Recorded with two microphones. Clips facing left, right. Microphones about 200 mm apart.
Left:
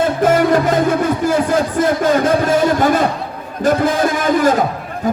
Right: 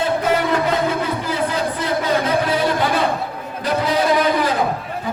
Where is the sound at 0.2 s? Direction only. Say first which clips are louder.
Left 6 dB; 45° left (ahead or behind).